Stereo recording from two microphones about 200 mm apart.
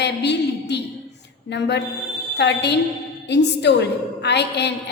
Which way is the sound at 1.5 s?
60° left (ahead or behind).